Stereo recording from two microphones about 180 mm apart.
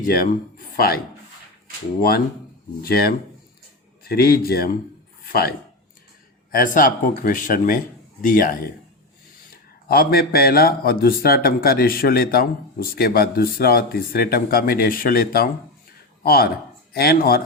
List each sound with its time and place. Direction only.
0.0 s a man's voice: 50° left (ahead or behind)
9.9 s a man's voice: 55° left (ahead or behind)